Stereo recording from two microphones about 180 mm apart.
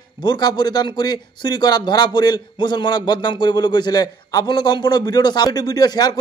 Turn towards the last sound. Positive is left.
turn(degrees=20)  # may be behind; listen again after turning